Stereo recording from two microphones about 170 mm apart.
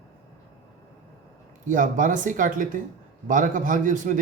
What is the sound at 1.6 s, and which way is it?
A man's voice, 50° right (ahead or behind).